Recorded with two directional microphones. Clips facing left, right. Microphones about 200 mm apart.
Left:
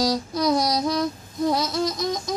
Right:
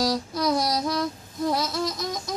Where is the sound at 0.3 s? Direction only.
20° left (ahead or behind).